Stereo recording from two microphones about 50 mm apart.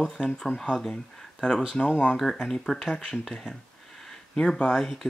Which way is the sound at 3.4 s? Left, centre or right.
Centre.